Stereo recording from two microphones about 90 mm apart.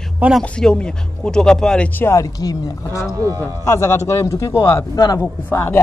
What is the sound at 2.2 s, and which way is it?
Speech, 40° left (ahead or behind).